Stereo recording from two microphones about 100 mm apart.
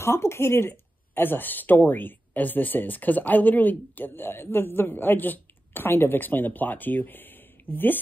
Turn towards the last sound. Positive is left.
turn(degrees=20)  # may be behind; listen again after turning